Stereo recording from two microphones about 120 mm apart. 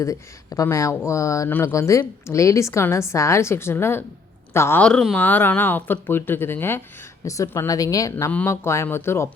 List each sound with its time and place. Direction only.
0.0 s a woman's voice: 25° left (ahead or behind)
4.8 s a woman's voice: 5° left (ahead or behind); by 8.1 s 30° left (ahead or behind)
8.1 s a woman's voice: 15° left (ahead or behind)